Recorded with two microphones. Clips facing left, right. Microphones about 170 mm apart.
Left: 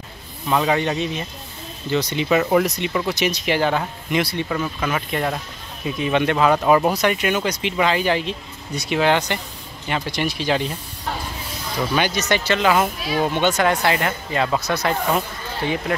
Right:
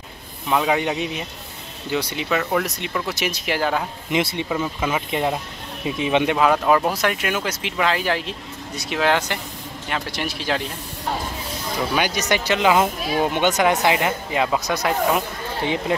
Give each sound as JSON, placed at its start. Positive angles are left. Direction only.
{"t": 0.5, "sound": "speech", "side_deg": -5}
{"t": 2.2, "sound": "speech", "side_deg": 10}
{"t": 4.1, "sound": "speech", "side_deg": -20}
{"t": 4.7, "sound": "speech", "side_deg": -10}
{"t": 11.9, "sound": "speech", "side_deg": -10}